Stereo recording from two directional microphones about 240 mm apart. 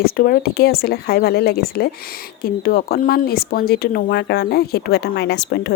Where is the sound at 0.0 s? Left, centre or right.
Left.